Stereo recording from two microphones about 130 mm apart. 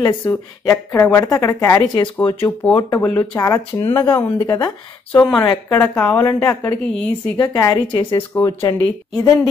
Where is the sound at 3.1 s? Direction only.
25° left (ahead or behind).